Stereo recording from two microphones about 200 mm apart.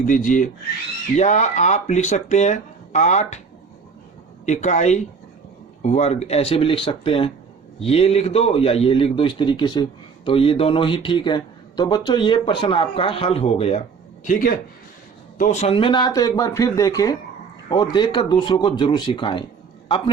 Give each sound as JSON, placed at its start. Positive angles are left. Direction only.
{"t": 0.0, "sound": "speech", "side_deg": 40}
{"t": 4.4, "sound": "speech", "side_deg": 35}
{"t": 14.3, "sound": "speech", "side_deg": 45}